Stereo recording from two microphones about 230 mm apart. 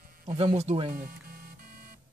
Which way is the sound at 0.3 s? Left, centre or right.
Right.